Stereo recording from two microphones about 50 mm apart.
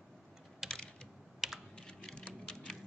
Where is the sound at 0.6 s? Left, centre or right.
Centre.